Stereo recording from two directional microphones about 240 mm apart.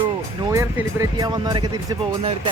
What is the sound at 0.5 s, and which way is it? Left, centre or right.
Speech, centre.